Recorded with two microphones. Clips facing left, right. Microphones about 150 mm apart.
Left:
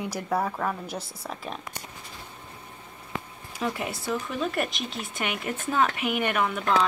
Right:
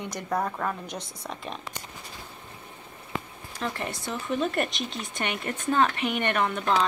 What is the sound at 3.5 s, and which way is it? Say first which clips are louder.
Speech: left 2 dB; 5° left (ahead or behind).